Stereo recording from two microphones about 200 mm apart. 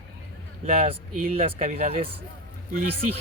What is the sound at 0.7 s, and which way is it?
Speech, 30° right (ahead or behind).